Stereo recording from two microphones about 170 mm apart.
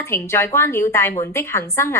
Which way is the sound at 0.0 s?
15° left (ahead or behind).